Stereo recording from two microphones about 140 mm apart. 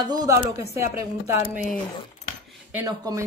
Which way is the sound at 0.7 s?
20° right (ahead or behind).